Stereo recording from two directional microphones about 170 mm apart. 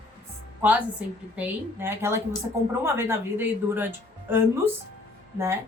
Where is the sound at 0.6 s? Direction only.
10° right (ahead or behind).